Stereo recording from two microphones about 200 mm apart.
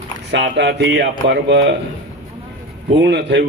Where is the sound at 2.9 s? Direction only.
60° right (ahead or behind).